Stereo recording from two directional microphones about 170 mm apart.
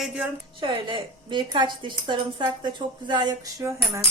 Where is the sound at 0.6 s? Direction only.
30° right (ahead or behind).